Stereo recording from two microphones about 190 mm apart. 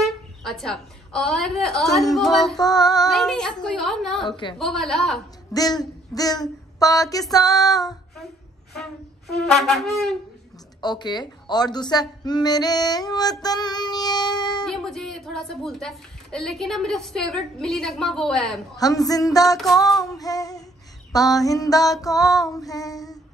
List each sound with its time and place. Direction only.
0.0 s a woman's voice: centre (ahead or behind)
2.6 s speech: 20° left (ahead or behind)
3.1 s speech: centre (ahead or behind)
4.3 s speech: 25° left (ahead or behind)
4.6 s speech: centre (ahead or behind)
5.5 s speech: 20° left (ahead or behind)
9.5 s speech: centre (ahead or behind)
10.8 s speech: 20° left (ahead or behind)
14.6 s speech: 5° left (ahead or behind)
18.8 s speech: 20° left (ahead or behind)
19.5 s speech: centre (ahead or behind)
20.1 s speech: 20° left (ahead or behind)